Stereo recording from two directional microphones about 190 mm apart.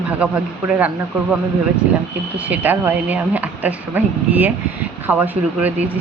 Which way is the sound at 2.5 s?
10° right (ahead or behind).